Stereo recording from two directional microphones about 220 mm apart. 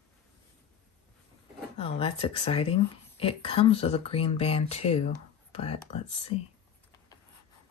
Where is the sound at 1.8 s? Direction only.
25° left (ahead or behind).